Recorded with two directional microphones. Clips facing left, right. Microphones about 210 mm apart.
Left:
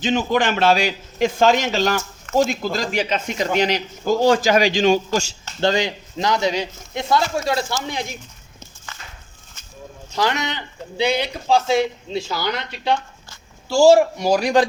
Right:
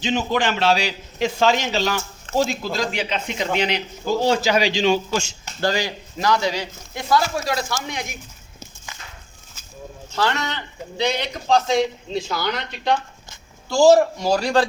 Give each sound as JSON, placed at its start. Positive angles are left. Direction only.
{"t": 0.0, "sound": "a man's voice", "side_deg": 50}
{"t": 5.5, "sound": "speech", "side_deg": 20}
{"t": 8.9, "sound": "walk", "side_deg": -15}
{"t": 10.1, "sound": "a man's voice", "side_deg": 15}